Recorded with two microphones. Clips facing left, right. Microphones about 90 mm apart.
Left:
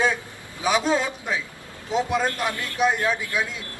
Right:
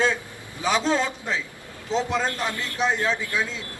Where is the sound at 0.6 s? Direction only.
15° left (ahead or behind).